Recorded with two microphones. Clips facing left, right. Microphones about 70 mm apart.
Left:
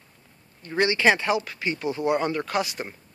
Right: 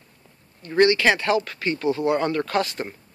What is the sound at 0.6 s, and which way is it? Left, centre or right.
Speech, centre.